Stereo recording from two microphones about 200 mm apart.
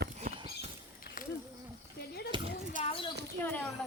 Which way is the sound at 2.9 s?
25° left (ahead or behind).